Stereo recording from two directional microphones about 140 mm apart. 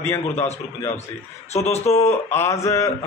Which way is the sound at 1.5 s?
50° left (ahead or behind).